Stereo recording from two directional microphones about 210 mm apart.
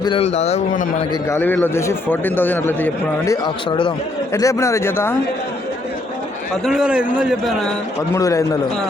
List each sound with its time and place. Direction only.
0.0 s a man's voice: 25° left (ahead or behind)
1.3 s a man's voice: 10° left (ahead or behind)
6.7 s a man's voice: 5° right (ahead or behind)
8.1 s a man's voice: 15° left (ahead or behind)